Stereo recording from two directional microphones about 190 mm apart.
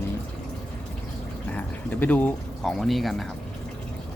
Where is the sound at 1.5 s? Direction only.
10° left (ahead or behind).